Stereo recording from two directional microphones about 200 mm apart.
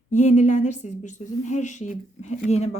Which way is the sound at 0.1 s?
35° left (ahead or behind).